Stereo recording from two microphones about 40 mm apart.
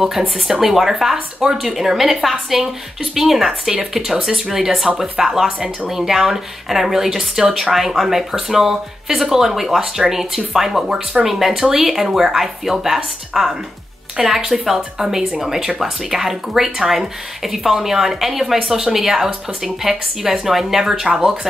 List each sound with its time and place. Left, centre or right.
0.5 s speech: centre